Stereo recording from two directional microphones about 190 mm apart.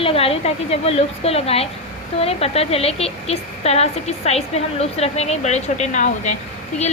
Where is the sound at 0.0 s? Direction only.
30° left (ahead or behind).